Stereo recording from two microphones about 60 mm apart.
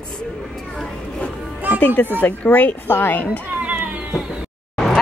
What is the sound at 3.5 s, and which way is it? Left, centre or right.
Cat, right.